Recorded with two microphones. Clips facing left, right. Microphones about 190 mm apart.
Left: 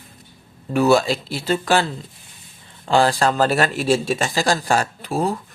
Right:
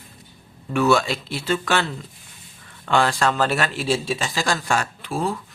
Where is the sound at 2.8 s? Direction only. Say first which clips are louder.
Left 3 dB; 35° left (ahead or behind).